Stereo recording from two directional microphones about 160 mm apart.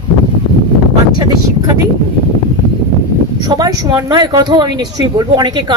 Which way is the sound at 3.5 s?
25° right (ahead or behind).